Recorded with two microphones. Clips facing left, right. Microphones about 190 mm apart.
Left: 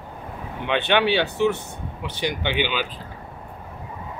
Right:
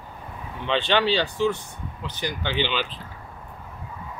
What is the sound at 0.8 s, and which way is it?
Speech, 60° left (ahead or behind).